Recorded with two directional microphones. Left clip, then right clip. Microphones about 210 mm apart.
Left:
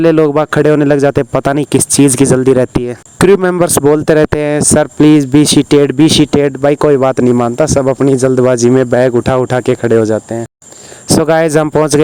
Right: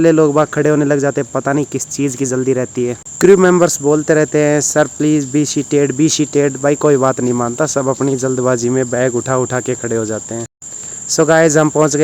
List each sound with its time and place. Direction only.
0.0 s speech: 45° left (ahead or behind)
11.2 s speech: 45° left (ahead or behind)